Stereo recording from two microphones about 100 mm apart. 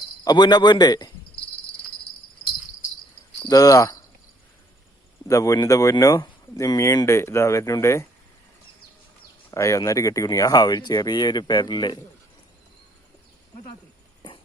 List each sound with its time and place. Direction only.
0.3 s a man's voice: 45° left (ahead or behind)
3.5 s speech: 35° left (ahead or behind)
5.3 s speech: 35° left (ahead or behind)
9.5 s speech: 30° left (ahead or behind); by 11.9 s 45° left (ahead or behind)